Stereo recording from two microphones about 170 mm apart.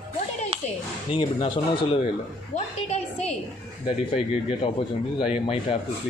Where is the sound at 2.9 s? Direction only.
40° left (ahead or behind).